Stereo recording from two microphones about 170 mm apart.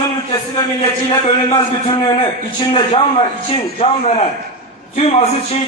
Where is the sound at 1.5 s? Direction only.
25° left (ahead or behind).